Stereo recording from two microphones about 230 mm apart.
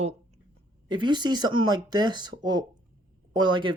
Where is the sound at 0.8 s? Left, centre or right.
Centre.